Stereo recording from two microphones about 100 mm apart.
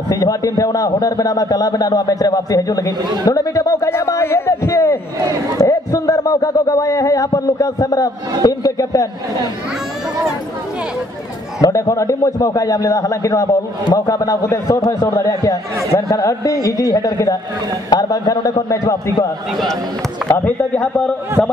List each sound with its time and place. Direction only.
0.1 s a man's voice: 35° left (ahead or behind)
11.6 s a man's voice: 35° left (ahead or behind)
19.5 s speech: centre (ahead or behind)
20.2 s speech: 20° left (ahead or behind)